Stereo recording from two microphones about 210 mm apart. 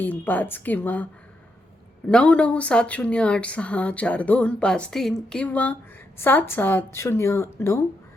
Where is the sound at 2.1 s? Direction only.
5° left (ahead or behind).